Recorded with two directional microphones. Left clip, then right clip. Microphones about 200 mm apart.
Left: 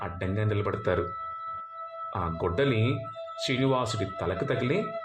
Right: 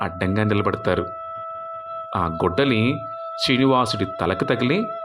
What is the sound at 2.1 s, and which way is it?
Speech, 25° right (ahead or behind).